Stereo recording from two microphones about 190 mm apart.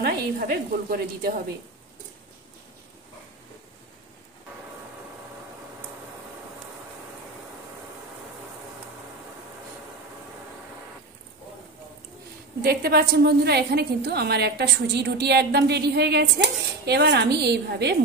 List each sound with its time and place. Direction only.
0.0 s a woman's voice: 50° right (ahead or behind)
12.6 s a woman's voice: 55° right (ahead or behind)